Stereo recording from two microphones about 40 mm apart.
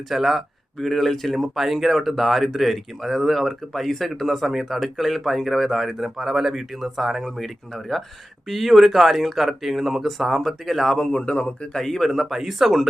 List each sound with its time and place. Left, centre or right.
0.1 s speech: centre
0.9 s speech: centre
7.3 s speech: centre
10.9 s speech: left
11.6 s speech: centre
12.0 s speech: centre